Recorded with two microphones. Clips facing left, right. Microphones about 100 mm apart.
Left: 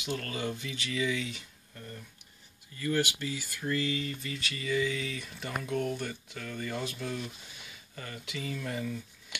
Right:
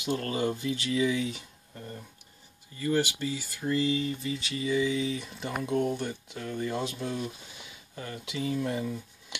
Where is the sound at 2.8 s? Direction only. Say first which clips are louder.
Right 3 dB; 30° right (ahead or behind).